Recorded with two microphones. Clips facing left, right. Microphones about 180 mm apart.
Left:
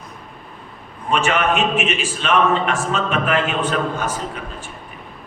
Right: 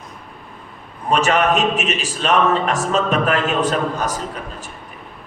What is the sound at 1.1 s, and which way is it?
A man's voice, 40° right (ahead or behind).